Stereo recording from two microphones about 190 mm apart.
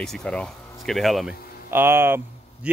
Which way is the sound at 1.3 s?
50° left (ahead or behind).